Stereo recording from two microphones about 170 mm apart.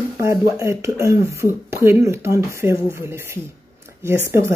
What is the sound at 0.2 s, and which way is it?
A woman's voice, 15° right (ahead or behind).